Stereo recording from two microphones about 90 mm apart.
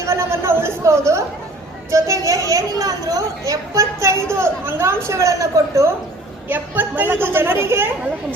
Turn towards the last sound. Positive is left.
turn(degrees=-25)  # may be behind; listen again after turning